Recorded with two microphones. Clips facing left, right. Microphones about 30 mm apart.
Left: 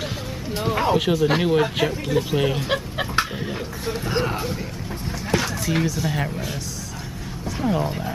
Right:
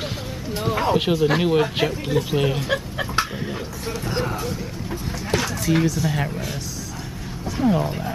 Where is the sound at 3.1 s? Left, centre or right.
Centre.